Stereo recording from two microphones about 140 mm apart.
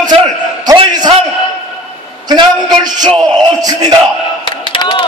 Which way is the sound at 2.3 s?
30° right (ahead or behind).